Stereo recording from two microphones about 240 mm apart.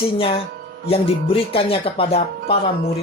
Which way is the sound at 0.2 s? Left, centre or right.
Left.